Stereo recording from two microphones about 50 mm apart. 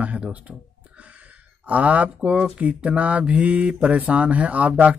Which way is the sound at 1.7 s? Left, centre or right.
Right.